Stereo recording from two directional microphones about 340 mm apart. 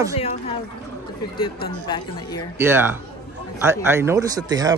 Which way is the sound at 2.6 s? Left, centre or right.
Centre.